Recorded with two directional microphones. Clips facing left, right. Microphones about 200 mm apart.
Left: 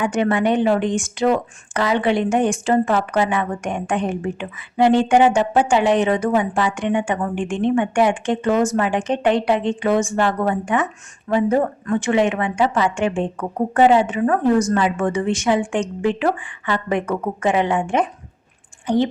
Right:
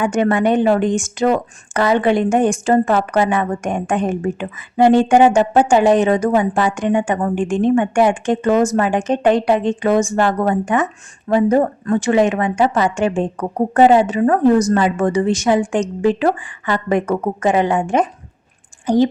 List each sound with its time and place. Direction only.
0.0 s a woman's voice: 45° right (ahead or behind)